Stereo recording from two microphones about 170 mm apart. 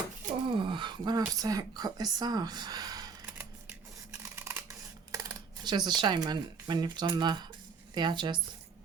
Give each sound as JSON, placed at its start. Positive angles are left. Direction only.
{"t": 0.4, "sound": "a sound", "side_deg": -30}
{"t": 1.3, "sound": "speech", "side_deg": -20}
{"t": 4.2, "sound": "scissors", "side_deg": -15}
{"t": 5.1, "sound": "speech", "side_deg": -25}